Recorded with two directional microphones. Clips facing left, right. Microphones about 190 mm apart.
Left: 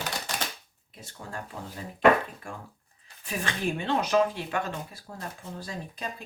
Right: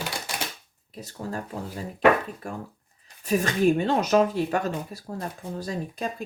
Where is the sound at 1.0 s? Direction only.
40° right (ahead or behind).